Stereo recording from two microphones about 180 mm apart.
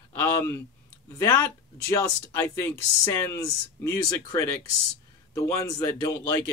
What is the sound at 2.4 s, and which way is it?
Speech, 15° left (ahead or behind).